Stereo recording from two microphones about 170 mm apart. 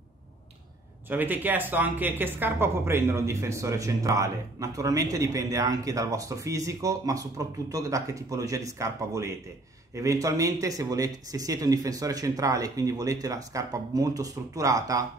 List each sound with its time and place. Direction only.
1.0 s a woman's voice: 10° right (ahead or behind)